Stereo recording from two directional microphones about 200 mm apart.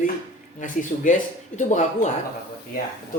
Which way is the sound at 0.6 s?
40° left (ahead or behind).